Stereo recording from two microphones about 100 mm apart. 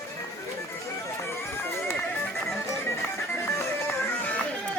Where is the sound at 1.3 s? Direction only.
25° left (ahead or behind).